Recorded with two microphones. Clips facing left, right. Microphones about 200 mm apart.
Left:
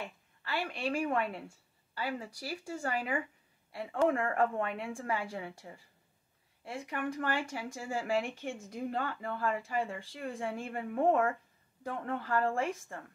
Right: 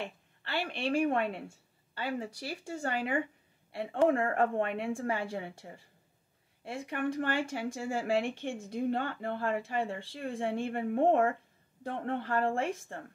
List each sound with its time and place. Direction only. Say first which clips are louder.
0.0 s a woman's voice: right 3 dB; 30° right (ahead or behind)